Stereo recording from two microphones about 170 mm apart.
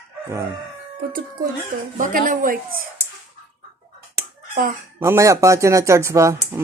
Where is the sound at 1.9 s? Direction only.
50° right (ahead or behind).